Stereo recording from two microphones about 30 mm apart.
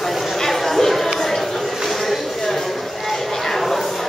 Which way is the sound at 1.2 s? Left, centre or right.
Centre.